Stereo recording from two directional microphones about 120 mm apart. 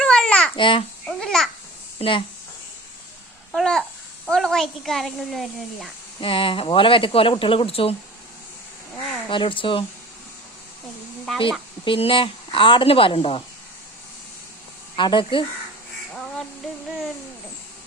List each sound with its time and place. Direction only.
0.0 s babbling: 5° left (ahead or behind)
0.5 s speech: 45° left (ahead or behind)
1.0 s babbling: centre (ahead or behind)
2.0 s speech: 45° left (ahead or behind)
3.5 s speech: 5° left (ahead or behind)
6.1 s speech: 50° left (ahead or behind)
9.3 s speech: 45° left (ahead or behind)
11.9 s speech: 50° left (ahead or behind)
14.9 s speech: 40° left (ahead or behind)
16.1 s a sound: 10° left (ahead or behind)